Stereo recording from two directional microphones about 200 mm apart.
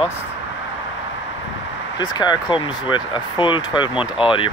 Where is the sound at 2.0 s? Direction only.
20° left (ahead or behind).